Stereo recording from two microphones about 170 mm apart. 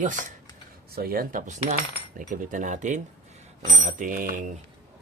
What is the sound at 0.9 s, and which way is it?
Cutlery, 60° right (ahead or behind).